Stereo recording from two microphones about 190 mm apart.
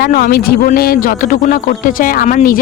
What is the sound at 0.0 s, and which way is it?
Speech, 50° left (ahead or behind).